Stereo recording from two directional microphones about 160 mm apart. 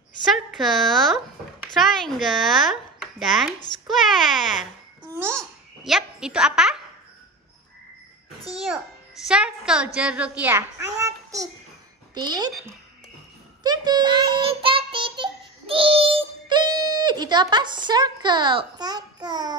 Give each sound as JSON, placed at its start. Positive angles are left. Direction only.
{"t": 0.3, "sound": "speech", "side_deg": 0}
{"t": 5.1, "sound": "a child's voice", "side_deg": -15}
{"t": 5.9, "sound": "speech", "side_deg": -5}
{"t": 8.5, "sound": "a child's voice", "side_deg": -5}
{"t": 13.6, "sound": "child singing", "side_deg": -25}